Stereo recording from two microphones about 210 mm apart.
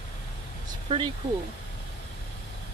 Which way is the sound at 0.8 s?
25° right (ahead or behind).